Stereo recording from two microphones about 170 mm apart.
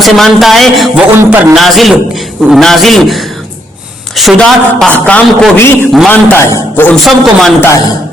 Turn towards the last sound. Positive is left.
turn(degrees=5)  # may be behind; listen again after turning